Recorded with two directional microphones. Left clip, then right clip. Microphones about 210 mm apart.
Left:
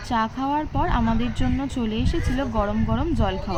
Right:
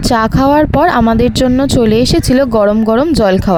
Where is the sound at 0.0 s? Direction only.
55° right (ahead or behind).